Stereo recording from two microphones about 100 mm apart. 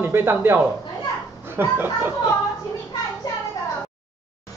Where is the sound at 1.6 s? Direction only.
20° right (ahead or behind).